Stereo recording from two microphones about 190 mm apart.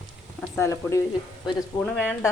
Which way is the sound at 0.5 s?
15° left (ahead or behind).